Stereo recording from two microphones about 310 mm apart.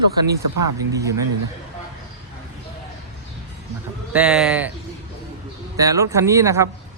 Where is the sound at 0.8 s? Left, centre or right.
Centre.